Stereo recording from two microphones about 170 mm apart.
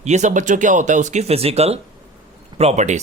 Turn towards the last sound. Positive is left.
turn(degrees=-45)  # may be behind; listen again after turning